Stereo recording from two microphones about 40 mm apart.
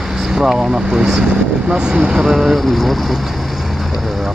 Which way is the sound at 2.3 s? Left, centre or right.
Centre.